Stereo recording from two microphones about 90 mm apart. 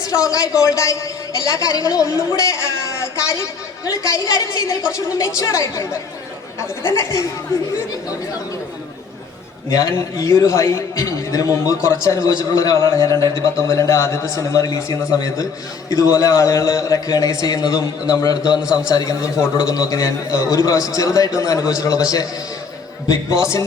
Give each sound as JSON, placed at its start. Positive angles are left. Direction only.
{"t": 0.0, "sound": "a man's voice", "side_deg": 40}
{"t": 9.6, "sound": "a man's voice", "side_deg": 40}
{"t": 18.6, "sound": "a man's voice", "side_deg": -10}
{"t": 18.9, "sound": "a man's voice", "side_deg": 45}
{"t": 23.0, "sound": "a man's voice", "side_deg": 35}